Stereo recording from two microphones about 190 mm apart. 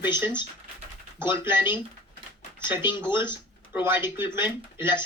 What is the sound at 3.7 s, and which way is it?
Speech, 10° right (ahead or behind).